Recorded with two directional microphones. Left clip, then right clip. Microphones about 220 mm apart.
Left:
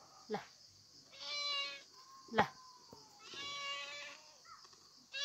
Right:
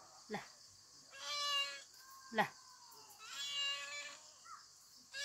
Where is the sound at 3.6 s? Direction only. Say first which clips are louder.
Right 2 dB; 10° left (ahead or behind).